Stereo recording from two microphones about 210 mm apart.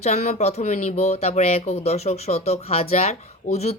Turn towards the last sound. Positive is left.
turn(degrees=30)  # may be behind; listen again after turning